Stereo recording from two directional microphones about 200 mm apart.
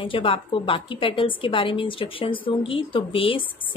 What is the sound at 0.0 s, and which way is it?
Speech, 25° left (ahead or behind).